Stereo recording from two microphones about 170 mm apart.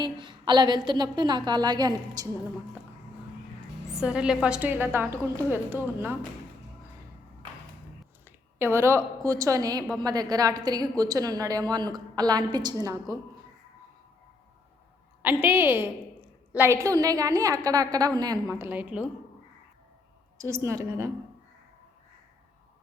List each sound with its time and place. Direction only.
0.0 s a woman's voice: 25° right (ahead or behind)
3.9 s a woman's voice: 5° right (ahead or behind)
8.5 s a woman's voice: 15° right (ahead or behind)
15.2 s a woman's voice: 10° right (ahead or behind)
20.4 s a woman's voice: 15° right (ahead or behind)